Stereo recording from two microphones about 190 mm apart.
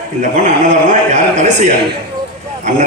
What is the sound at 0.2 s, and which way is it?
A man's voice, 40° right (ahead or behind).